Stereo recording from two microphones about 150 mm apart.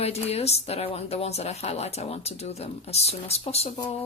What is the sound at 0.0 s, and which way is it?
A woman's voice, 45° left (ahead or behind).